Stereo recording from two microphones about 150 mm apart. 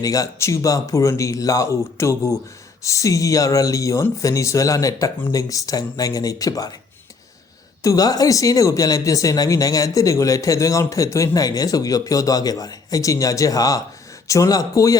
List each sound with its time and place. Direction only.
0.0 s speech: 25° left (ahead or behind)
7.8 s speech: 25° left (ahead or behind)